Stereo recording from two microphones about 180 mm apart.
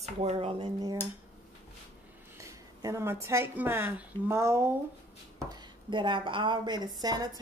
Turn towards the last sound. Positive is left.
turn(degrees=-20)  # may be behind; listen again after turning